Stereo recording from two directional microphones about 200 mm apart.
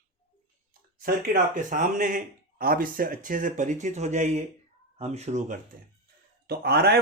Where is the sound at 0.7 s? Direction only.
45° right (ahead or behind).